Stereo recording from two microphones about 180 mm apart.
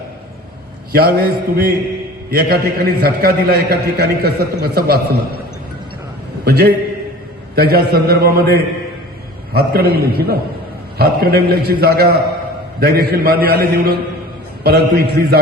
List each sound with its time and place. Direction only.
0.9 s a man's voice: 60° right (ahead or behind)
6.4 s a man's voice: 60° right (ahead or behind)